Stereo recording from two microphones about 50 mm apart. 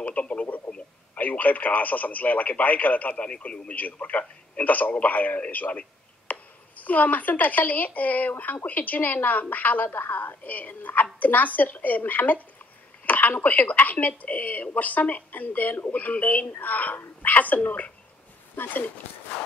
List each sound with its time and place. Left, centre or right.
0.0 s radio: left
1.1 s speech: left